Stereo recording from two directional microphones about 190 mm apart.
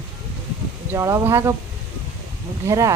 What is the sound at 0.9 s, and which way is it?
Speech, 15° right (ahead or behind).